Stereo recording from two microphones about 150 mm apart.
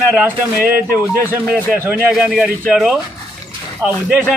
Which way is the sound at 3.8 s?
15° right (ahead or behind).